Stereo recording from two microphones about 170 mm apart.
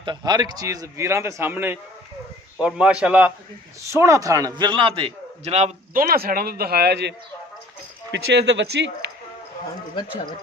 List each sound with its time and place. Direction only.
0.0 s a man's voice: 25° right (ahead or behind)
5.9 s speech: 60° right (ahead or behind); by 7.2 s 80° right
8.1 s speech: 90° right